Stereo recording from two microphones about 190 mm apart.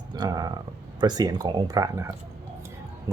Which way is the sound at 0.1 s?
20° right (ahead or behind).